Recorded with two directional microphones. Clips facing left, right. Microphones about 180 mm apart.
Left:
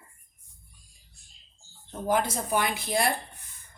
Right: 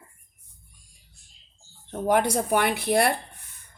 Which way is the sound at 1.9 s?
65° right (ahead or behind).